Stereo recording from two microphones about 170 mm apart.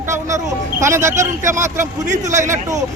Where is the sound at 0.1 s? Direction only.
15° right (ahead or behind).